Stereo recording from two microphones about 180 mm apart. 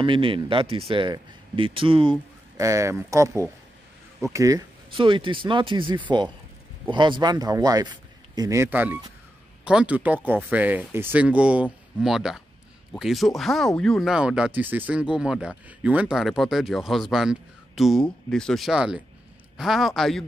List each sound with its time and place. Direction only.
0.0 s speech: 30° right (ahead or behind)
2.5 s speech: 15° right (ahead or behind); by 20.2 s centre (ahead or behind)